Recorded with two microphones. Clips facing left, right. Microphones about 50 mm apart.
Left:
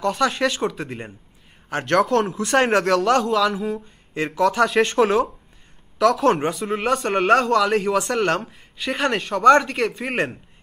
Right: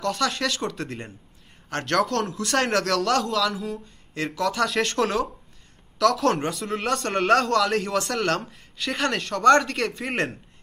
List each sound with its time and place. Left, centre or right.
0.0 s a man's voice: centre
4.1 s a man's voice: centre